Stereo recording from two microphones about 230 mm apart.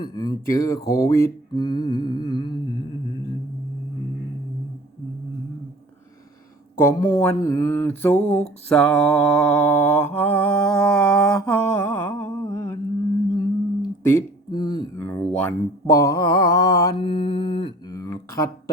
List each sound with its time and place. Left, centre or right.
0.0 s mantra: centre
0.8 s speech: left
1.0 s mantra: centre
6.7 s mantra: centre
14.0 s a sound: centre
15.4 s mantra: centre